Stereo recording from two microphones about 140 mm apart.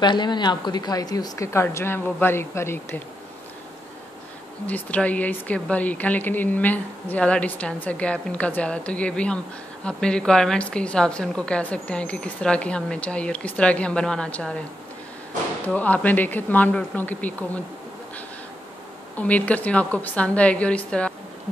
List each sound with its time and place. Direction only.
0.0 s a woman's voice: 30° left (ahead or behind)
4.6 s a woman's voice: 10° left (ahead or behind)
15.7 s a woman's voice: 10° left (ahead or behind)
19.1 s a woman's voice: 10° left (ahead or behind)